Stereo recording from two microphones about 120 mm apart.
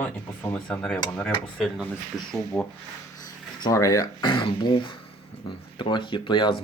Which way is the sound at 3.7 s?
30° left (ahead or behind).